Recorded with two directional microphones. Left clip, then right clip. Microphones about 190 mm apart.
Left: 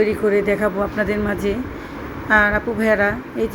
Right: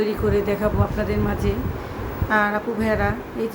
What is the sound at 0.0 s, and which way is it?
A woman's voice, 15° left (ahead or behind).